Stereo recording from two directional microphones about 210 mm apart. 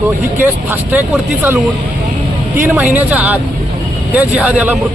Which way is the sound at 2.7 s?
5° right (ahead or behind).